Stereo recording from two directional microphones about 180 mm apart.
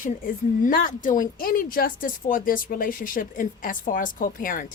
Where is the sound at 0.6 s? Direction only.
50° left (ahead or behind).